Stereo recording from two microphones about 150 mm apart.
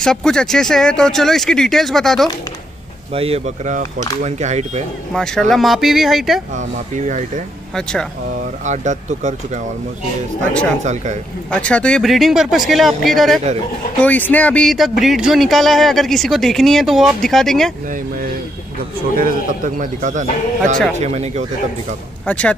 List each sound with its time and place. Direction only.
0.0 s speech: 5° left (ahead or behind)
3.2 s speech: 45° right (ahead or behind)
5.1 s speech: 5° left (ahead or behind)
7.1 s a man's voice: 55° right (ahead or behind)
7.7 s speech: 5° left (ahead or behind)
8.6 s speech: 50° right (ahead or behind)
10.8 s speech: 50° right (ahead or behind)
11.6 s speech: 5° left (ahead or behind)
19.1 s a man's voice: 65° right (ahead or behind); by 21.5 s 45° right (ahead or behind)
22.2 s speech: 10° left (ahead or behind)